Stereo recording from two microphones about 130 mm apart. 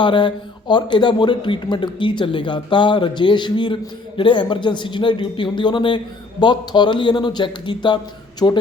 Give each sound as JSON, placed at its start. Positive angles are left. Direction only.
{"t": 0.0, "sound": "a man's voice", "side_deg": 40}